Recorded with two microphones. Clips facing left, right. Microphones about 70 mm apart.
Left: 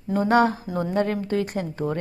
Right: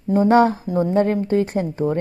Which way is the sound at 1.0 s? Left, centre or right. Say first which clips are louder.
Right 5 dB; right.